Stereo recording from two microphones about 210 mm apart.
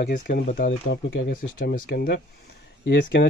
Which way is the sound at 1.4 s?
40° left (ahead or behind).